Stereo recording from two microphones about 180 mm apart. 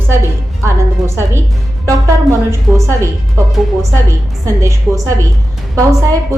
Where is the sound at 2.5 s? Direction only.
15° right (ahead or behind).